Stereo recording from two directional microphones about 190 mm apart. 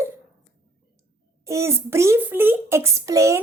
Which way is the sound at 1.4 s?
15° right (ahead or behind).